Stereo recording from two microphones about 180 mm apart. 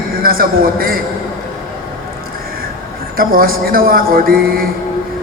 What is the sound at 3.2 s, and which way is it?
A man's voice, 55° right (ahead or behind).